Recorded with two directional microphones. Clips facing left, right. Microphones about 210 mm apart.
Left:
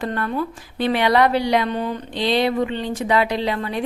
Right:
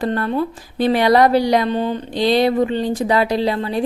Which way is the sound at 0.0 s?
35° right (ahead or behind).